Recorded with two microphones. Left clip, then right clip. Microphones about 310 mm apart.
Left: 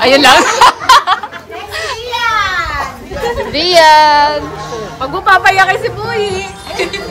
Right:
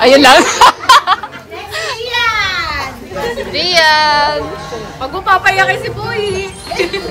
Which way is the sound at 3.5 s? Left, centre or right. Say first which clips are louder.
Left 4 dB; centre.